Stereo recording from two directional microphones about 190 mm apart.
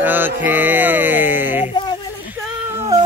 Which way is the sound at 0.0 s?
10° right (ahead or behind).